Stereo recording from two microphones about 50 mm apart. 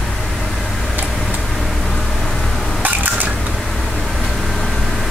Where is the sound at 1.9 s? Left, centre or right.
Centre.